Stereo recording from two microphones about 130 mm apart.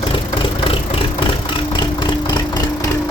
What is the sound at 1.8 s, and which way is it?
Vehicle, 35° left (ahead or behind).